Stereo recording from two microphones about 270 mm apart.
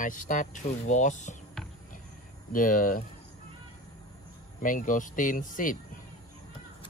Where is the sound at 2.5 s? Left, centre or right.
Left.